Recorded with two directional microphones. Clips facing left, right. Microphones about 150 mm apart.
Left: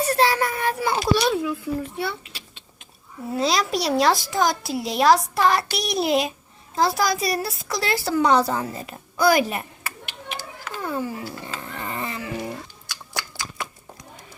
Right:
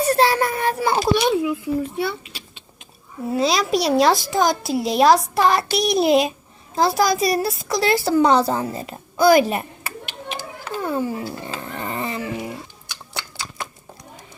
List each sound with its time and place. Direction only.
0.1 s a child's voice: 30° right (ahead or behind)
1.2 s a child's voice: 15° right (ahead or behind)
10.6 s dog: 30° right (ahead or behind)
12.9 s biting: 25° right (ahead or behind)